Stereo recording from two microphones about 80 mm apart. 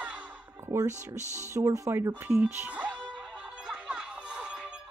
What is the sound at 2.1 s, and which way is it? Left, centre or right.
Music, right.